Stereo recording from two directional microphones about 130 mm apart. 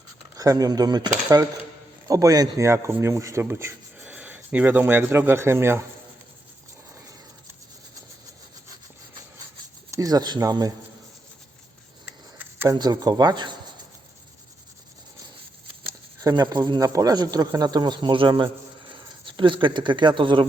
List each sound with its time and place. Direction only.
0.3 s speech: 30° right (ahead or behind)
9.9 s speech: 30° right (ahead or behind)
12.0 s rub: 15° right (ahead or behind)
12.7 s speech: 30° right (ahead or behind)
16.2 s speech: 35° right (ahead or behind)